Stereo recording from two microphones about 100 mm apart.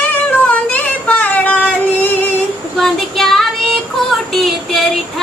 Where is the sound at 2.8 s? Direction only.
5° left (ahead or behind).